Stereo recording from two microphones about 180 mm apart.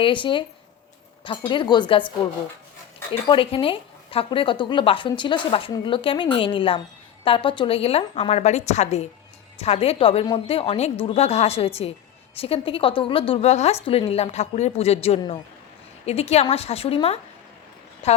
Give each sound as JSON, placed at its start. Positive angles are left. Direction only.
{"t": 0.0, "sound": "a woman's voice", "side_deg": 30}